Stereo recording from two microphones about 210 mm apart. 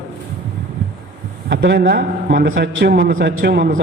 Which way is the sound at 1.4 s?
55° right (ahead or behind).